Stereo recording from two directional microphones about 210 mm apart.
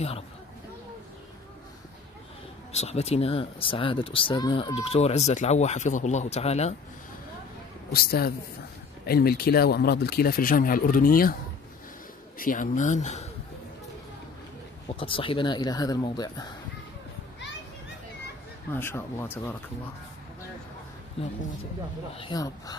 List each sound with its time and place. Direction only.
2.7 s speech: 30° left (ahead or behind)
7.9 s speech: 45° left (ahead or behind)
12.4 s speech: 40° left (ahead or behind)
14.9 s speech: 25° left (ahead or behind)
18.7 s speech: 10° left (ahead or behind)
22.2 s speech: 20° left (ahead or behind)